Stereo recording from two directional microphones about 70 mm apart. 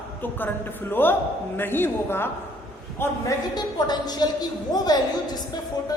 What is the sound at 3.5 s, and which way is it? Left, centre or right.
A woman's voice, left.